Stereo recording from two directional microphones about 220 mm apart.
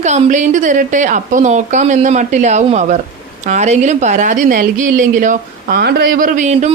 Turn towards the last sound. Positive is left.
turn(degrees=-35)  # may be behind; listen again after turning